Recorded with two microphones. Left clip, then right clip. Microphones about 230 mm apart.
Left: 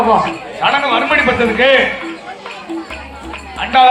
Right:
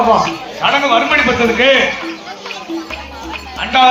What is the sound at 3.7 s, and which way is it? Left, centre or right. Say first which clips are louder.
Speech: left 1 dB; left.